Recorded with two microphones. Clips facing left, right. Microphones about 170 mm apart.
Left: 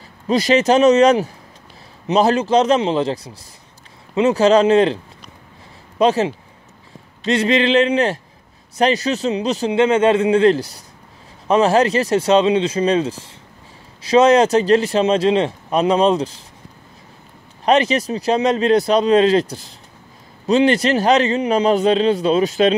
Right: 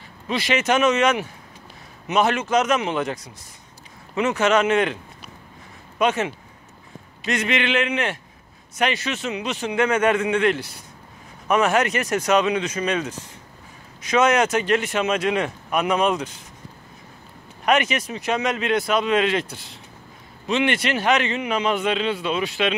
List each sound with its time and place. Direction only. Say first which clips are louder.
0.3 s speech: left 7 dB; 40° left (ahead or behind)
17.6 s speech: left 5 dB; 35° left (ahead or behind)